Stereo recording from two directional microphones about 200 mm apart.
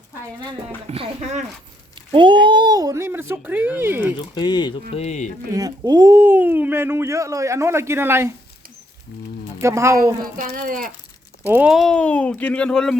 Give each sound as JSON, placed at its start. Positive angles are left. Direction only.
{"t": 0.9, "sound": "speech", "side_deg": -30}
{"t": 2.0, "sound": "speech", "side_deg": -25}
{"t": 4.4, "sound": "speech", "side_deg": 20}
{"t": 5.5, "sound": "speech", "side_deg": -20}
{"t": 9.6, "sound": "speech", "side_deg": -15}
{"t": 10.3, "sound": "speech", "side_deg": -40}
{"t": 11.4, "sound": "speech", "side_deg": -5}